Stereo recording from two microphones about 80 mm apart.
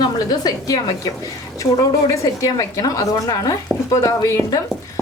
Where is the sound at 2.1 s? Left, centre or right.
Left.